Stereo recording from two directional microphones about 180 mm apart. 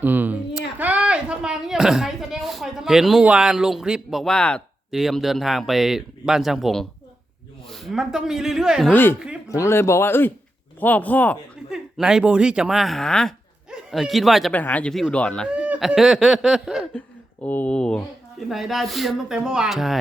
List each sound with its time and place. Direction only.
0.0 s a sound: 10° right (ahead or behind)
0.8 s speech: 10° right (ahead or behind)
8.9 s speech: 10° left (ahead or behind)
9.1 s speech: 5° right (ahead or behind)
9.5 s speech: 15° left (ahead or behind)
11.7 s speech: 5° right (ahead or behind)
15.4 s speech: 5° right (ahead or behind)
17.4 s speech: 10° left (ahead or behind)